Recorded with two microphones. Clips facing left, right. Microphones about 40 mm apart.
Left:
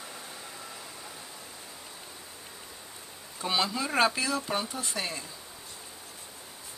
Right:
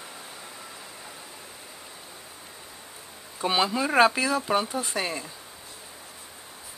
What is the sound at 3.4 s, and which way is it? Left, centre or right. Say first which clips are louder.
Speech: right 5 dB; centre.